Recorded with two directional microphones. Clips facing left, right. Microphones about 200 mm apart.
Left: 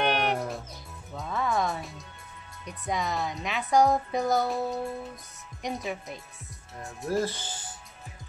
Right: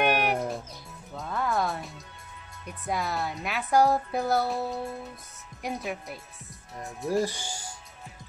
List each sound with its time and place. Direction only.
0.0 s music: 10° right (ahead or behind)
2.6 s a woman's voice: 5° right (ahead or behind)
7.2 s speech: 15° right (ahead or behind)